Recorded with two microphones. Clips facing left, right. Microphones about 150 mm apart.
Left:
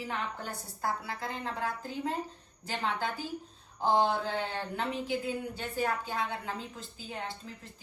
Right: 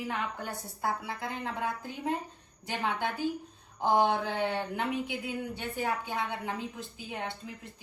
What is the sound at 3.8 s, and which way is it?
A woman's voice, 15° right (ahead or behind).